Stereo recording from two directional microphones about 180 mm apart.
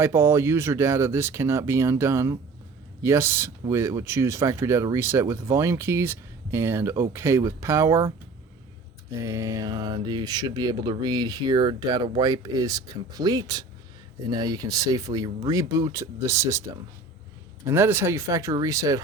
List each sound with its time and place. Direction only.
0.0 s speech: 15° right (ahead or behind)
9.0 s speech: 15° right (ahead or behind)